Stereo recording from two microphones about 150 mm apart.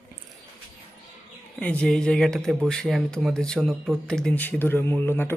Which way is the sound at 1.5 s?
10° left (ahead or behind).